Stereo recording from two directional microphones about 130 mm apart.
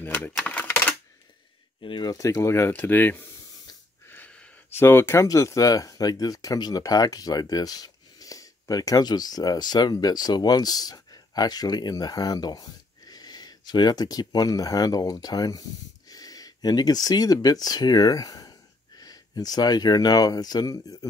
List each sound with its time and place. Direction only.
0.0 s typewriter: 15° left (ahead or behind)
1.8 s speech: 40° left (ahead or behind)